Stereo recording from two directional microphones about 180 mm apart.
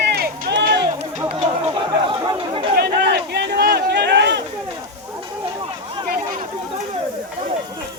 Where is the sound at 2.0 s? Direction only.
30° right (ahead or behind).